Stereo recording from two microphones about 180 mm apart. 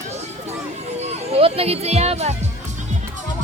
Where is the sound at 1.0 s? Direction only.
35° right (ahead or behind).